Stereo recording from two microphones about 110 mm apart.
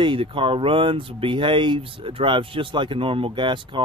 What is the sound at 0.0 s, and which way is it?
Speech, 50° right (ahead or behind).